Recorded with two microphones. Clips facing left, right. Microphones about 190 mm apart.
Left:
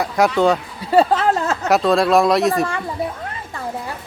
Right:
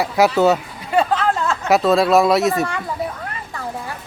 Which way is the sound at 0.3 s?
5° right (ahead or behind).